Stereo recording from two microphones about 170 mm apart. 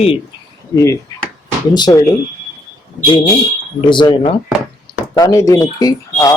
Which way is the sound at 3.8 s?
25° left (ahead or behind).